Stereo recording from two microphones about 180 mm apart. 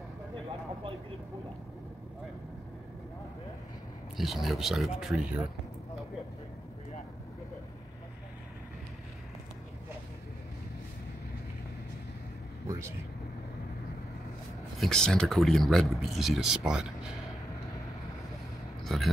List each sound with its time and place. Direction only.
4.2 s speech: centre (ahead or behind)
12.6 s vehicle: 15° right (ahead or behind)
14.8 s speech: 5° left (ahead or behind)
18.9 s speech: centre (ahead or behind)